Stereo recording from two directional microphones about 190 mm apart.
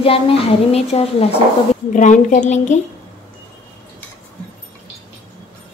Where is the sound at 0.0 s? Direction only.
30° left (ahead or behind).